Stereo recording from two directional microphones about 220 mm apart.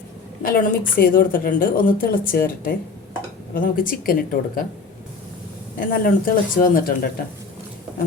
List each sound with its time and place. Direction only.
0.4 s a woman's voice: 40° left (ahead or behind)
5.9 s a woman's voice: 40° left (ahead or behind)